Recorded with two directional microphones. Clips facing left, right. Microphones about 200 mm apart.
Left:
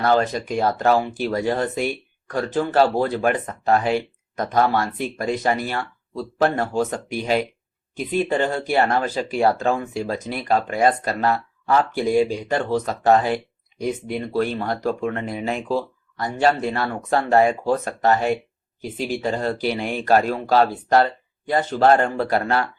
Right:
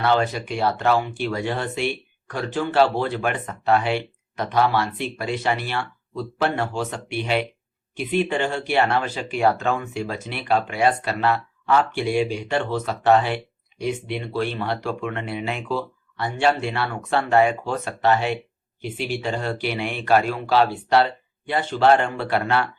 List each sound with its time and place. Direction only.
0.0 s speech: 40° left (ahead or behind)